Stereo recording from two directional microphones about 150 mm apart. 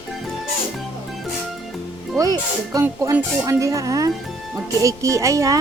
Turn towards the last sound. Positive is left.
turn(degrees=-20)  # may be behind; listen again after turning